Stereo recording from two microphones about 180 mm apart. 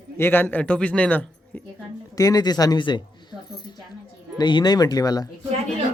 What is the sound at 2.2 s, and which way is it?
A man's voice, 20° left (ahead or behind).